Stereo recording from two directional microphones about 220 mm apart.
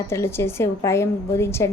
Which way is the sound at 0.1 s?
10° left (ahead or behind).